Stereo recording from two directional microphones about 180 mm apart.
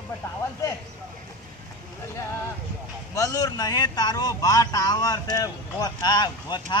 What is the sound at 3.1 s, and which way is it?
A man's voice, 20° left (ahead or behind).